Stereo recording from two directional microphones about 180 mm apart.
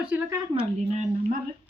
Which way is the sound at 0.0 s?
5° right (ahead or behind).